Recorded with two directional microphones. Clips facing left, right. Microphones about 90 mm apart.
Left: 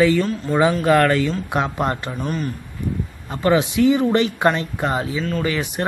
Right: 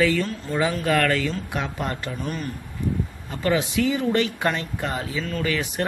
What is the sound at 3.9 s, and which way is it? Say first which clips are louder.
Speech: left 4 dB; 30° left (ahead or behind).